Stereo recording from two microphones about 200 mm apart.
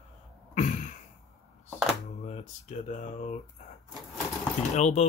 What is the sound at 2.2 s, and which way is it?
Speech, 35° left (ahead or behind).